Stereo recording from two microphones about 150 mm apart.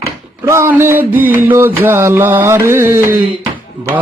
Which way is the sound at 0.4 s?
20° right (ahead or behind).